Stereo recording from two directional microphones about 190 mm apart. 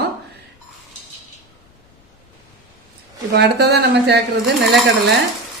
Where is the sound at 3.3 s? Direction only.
60° right (ahead or behind).